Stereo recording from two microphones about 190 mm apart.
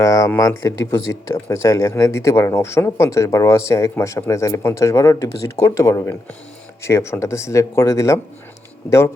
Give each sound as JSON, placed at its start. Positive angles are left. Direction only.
{"t": 0.0, "sound": "speech", "side_deg": 15}